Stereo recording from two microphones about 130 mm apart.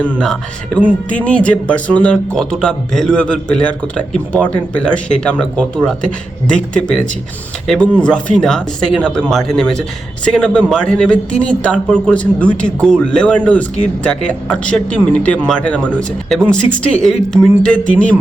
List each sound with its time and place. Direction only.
1.1 s a man's voice: 10° left (ahead or behind)